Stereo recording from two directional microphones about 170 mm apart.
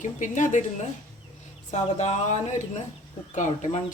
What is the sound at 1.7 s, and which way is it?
Speech, 45° left (ahead or behind).